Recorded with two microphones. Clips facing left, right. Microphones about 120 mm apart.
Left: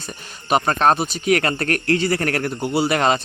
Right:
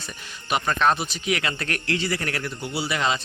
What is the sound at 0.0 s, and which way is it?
A man's voice, 40° left (ahead or behind).